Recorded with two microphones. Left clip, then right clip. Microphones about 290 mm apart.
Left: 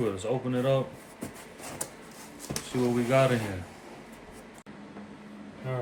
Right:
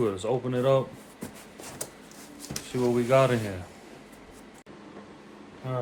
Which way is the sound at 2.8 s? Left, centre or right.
Centre.